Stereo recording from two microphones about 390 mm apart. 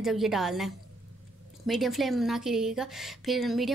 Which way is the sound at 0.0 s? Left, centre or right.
Centre.